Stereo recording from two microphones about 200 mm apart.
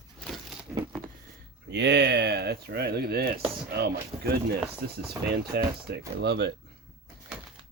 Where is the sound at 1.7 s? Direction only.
60° right (ahead or behind).